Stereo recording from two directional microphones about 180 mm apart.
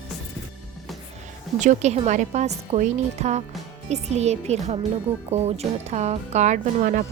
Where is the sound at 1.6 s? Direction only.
40° right (ahead or behind).